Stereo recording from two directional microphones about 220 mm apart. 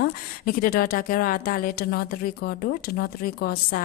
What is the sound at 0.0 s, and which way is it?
A woman's voice, 40° left (ahead or behind).